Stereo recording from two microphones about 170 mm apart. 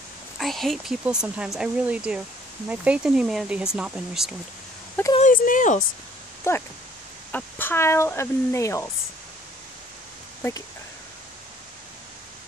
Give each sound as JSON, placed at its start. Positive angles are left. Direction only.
{"t": 0.4, "sound": "speech", "side_deg": 0}
{"t": 5.1, "sound": "speech", "side_deg": 50}
{"t": 6.5, "sound": "speech", "side_deg": 15}